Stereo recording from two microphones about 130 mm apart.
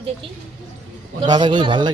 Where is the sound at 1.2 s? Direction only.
35° right (ahead or behind).